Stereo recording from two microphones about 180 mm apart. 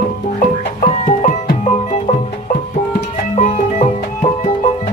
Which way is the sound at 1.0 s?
45° left (ahead or behind).